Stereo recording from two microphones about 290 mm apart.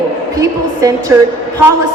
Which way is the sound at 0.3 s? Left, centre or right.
Centre.